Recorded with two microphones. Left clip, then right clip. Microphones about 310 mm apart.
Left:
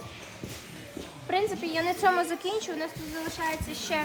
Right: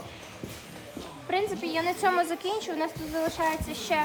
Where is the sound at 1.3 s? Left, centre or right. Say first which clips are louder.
Left 1 dB; centre.